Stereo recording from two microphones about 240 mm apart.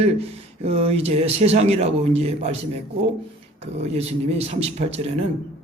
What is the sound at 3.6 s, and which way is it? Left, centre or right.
Speech, right.